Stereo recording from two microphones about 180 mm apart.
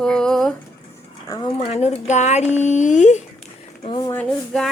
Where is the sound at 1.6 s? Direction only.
35° left (ahead or behind).